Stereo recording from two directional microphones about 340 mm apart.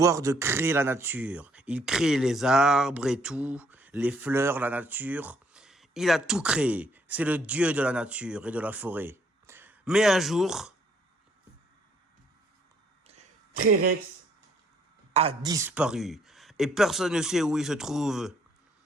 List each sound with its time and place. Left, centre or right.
0.0 s speech: centre
13.1 s a sound: right
15.1 s speech: centre